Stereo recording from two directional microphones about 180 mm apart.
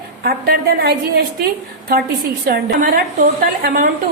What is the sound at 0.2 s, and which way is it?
A woman's voice, 60° right (ahead or behind).